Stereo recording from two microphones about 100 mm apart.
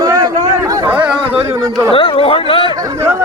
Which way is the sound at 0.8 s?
15° right (ahead or behind).